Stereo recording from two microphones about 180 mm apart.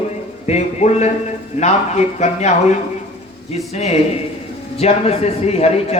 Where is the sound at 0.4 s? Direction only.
40° left (ahead or behind).